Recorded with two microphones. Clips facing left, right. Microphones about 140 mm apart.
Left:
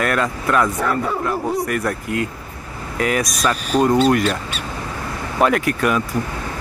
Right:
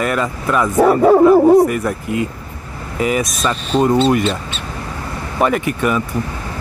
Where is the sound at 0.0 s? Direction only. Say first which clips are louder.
Right 1 dB; centre (ahead or behind).